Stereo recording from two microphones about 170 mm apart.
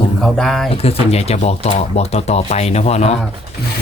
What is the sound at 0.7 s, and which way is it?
Speech, 35° left (ahead or behind).